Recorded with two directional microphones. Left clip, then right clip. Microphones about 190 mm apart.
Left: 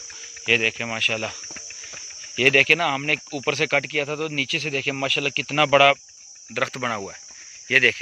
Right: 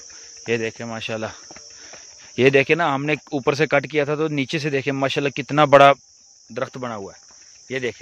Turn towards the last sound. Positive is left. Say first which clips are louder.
# left 9 dB
turn(degrees=-15)  # may be behind; listen again after turning